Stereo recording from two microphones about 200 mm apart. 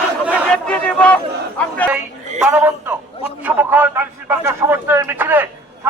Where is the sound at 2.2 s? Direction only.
35° right (ahead or behind).